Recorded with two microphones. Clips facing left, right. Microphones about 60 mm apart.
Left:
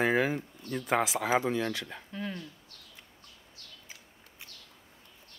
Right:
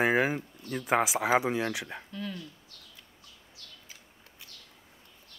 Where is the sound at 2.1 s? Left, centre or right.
Left.